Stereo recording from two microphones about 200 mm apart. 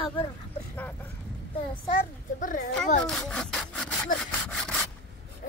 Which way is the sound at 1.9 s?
40° left (ahead or behind).